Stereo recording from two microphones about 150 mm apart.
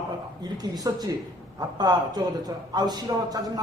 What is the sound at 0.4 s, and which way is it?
A man's voice, 25° right (ahead or behind).